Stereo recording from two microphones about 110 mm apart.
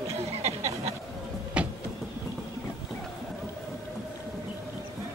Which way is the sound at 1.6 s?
10° right (ahead or behind).